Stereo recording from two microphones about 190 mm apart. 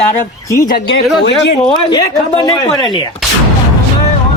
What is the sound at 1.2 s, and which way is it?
Speech, 65° left (ahead or behind).